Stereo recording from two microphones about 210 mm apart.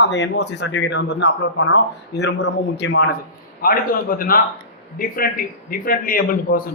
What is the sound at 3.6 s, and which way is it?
A man's voice, 40° left (ahead or behind).